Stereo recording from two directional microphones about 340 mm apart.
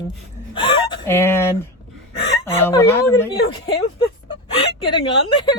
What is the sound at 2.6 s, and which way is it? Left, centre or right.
Speech, centre.